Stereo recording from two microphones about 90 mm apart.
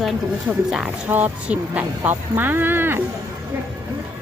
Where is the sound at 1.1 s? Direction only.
15° right (ahead or behind).